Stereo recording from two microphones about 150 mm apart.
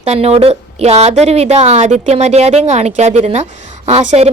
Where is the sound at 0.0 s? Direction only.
45° right (ahead or behind).